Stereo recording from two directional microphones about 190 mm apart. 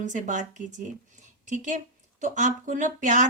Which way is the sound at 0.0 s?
40° right (ahead or behind).